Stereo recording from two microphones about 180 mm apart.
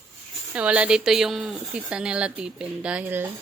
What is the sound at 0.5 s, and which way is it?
A woman's voice, 5° right (ahead or behind).